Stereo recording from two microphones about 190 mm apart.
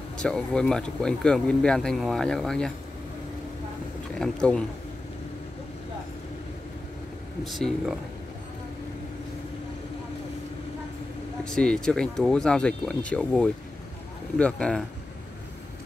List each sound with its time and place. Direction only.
0.2 s speech: 5° left (ahead or behind)
4.2 s speech: 5° left (ahead or behind)
7.4 s speech: centre (ahead or behind)
11.4 s speech: 5° left (ahead or behind)